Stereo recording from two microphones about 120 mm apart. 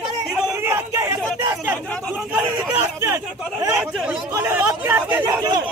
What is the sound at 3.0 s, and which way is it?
Speech, 25° right (ahead or behind).